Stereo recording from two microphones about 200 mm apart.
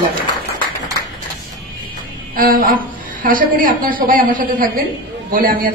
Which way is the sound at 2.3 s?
45° right (ahead or behind).